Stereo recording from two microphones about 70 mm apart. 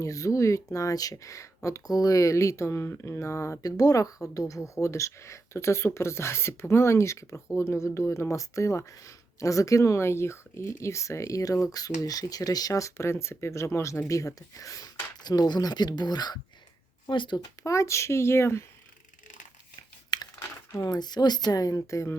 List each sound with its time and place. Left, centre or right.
0.0 s speech: left
3.7 s speech: left
15.1 s speech: left
17.7 s speech: left
20.1 s crumpling: left
20.7 s speech: left